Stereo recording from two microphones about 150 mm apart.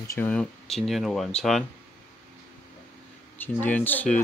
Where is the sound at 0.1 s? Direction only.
10° left (ahead or behind).